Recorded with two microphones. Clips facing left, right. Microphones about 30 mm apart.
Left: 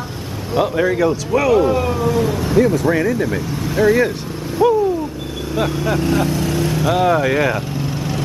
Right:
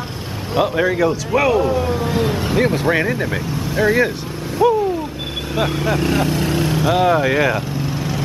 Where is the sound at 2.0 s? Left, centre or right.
Right.